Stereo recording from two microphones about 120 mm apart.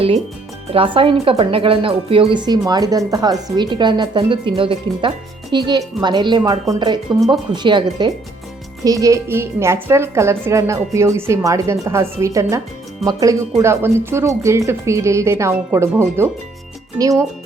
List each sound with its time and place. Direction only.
0.7 s speech: 45° right (ahead or behind); by 17.2 s 25° right (ahead or behind)